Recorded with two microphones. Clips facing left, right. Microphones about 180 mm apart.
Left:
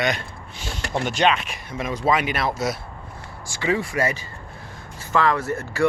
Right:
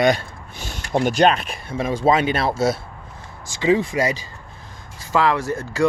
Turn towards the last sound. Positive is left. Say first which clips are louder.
# right 2 dB
turn(degrees=-10)  # may be behind; listen again after turning